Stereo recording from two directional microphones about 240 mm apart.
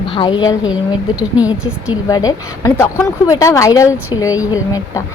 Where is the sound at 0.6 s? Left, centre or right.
Centre.